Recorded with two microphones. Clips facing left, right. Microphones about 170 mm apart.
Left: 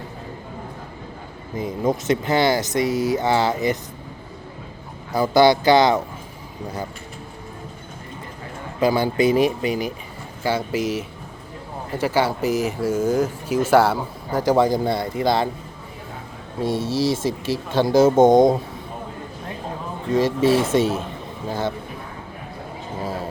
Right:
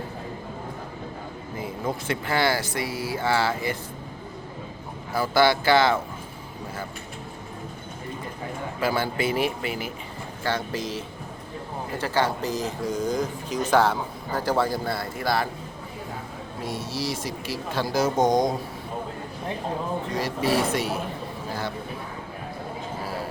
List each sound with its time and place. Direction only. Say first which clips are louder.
1.5 s speech: left 8 dB; 20° left (ahead or behind)
5.1 s speech: left 5 dB; 20° left (ahead or behind)
8.8 s speech: left 7 dB; 15° left (ahead or behind)
16.6 s speech: left 9 dB; 25° left (ahead or behind)
20.1 s speech: left 8 dB; 25° left (ahead or behind)